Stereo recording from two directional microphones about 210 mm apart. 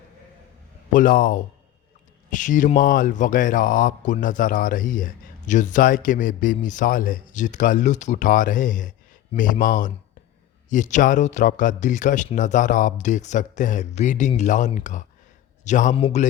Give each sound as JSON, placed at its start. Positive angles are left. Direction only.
{"t": 0.9, "sound": "speech", "side_deg": 40}